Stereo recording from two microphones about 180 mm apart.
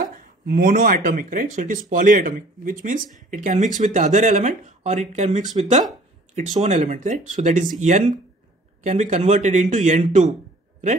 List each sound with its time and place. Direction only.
0.1 s a man's voice: 50° right (ahead or behind)
8.8 s a man's voice: 40° right (ahead or behind)